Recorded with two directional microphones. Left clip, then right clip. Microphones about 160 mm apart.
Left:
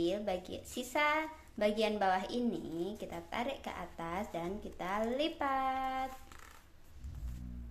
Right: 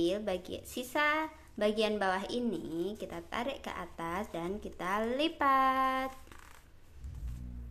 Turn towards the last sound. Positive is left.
turn(degrees=-30)  # may be behind; listen again after turning